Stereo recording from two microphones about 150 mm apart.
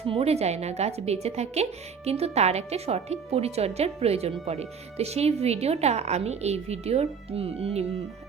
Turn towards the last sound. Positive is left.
turn(degrees=-40)  # may be behind; listen again after turning